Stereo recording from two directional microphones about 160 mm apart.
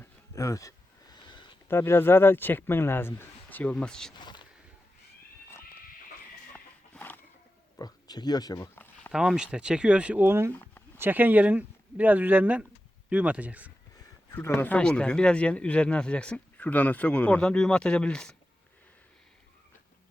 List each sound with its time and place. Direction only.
0.0 s a sound: 20° left (ahead or behind)
1.6 s speech: 15° left (ahead or behind)
4.1 s speech: 30° left (ahead or behind)
6.9 s a sound: 10° left (ahead or behind)
7.8 s speech: 25° left (ahead or behind)
9.1 s speech: 5° right (ahead or behind)
10.5 s a sound: 10° left (ahead or behind)
10.9 s speech: 15° right (ahead or behind)
14.3 s speech: 10° left (ahead or behind)